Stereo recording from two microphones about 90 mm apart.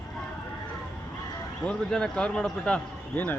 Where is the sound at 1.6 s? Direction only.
10° left (ahead or behind).